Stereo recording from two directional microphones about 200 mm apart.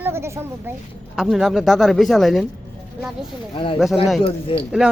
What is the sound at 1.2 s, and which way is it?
A woman's voice, centre (ahead or behind).